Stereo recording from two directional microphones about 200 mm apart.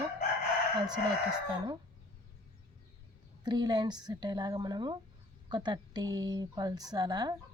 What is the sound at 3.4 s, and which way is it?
Speech, 20° right (ahead or behind).